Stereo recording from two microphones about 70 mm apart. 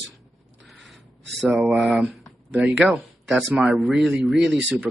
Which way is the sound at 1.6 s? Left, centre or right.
Centre.